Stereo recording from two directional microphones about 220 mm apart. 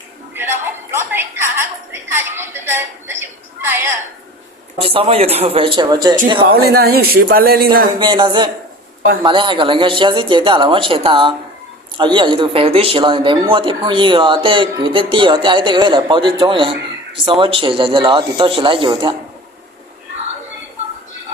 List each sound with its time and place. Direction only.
0.3 s a sound: 10° right (ahead or behind)
4.8 s speech: 25° right (ahead or behind)
6.4 s speech: 45° right (ahead or behind)
7.9 s speech: 20° right (ahead or behind)